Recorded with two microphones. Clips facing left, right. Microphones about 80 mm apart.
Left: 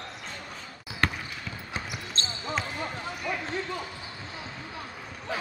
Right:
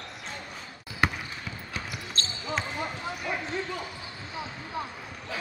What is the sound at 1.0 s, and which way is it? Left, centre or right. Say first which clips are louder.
Basketball bounce: right 1 dB; centre.